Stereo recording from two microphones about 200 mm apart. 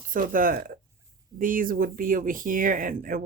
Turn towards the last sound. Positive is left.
turn(degrees=-45)  # may be behind; listen again after turning